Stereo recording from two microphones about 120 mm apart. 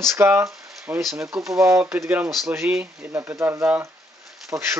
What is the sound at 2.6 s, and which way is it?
Speech, 10° right (ahead or behind).